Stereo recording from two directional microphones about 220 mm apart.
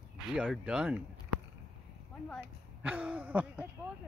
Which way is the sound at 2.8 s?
5° right (ahead or behind).